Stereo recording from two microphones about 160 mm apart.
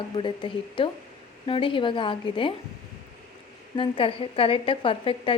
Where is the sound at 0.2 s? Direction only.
30° left (ahead or behind).